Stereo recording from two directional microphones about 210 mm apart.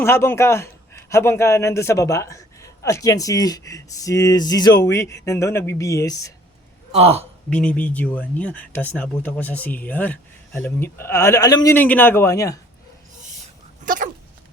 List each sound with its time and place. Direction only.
0.0 s a man's voice: 10° left (ahead or behind)
6.9 s a woman's voice: 30° right (ahead or behind)
7.5 s a man's voice: 5° left (ahead or behind)
13.8 s dog: 40° right (ahead or behind)